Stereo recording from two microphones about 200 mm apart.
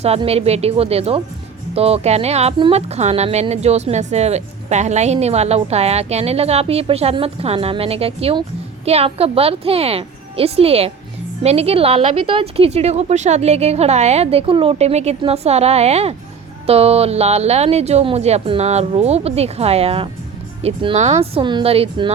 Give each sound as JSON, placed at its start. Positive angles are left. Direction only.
{"t": 0.0, "sound": "speech", "side_deg": -30}